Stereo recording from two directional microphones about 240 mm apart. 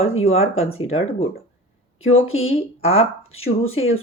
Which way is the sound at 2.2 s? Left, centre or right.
Left.